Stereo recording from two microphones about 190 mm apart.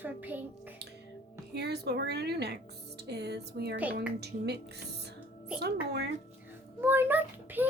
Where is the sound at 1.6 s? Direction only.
60° right (ahead or behind).